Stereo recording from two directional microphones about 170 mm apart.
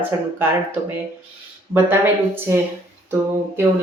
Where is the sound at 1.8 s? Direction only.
15° right (ahead or behind).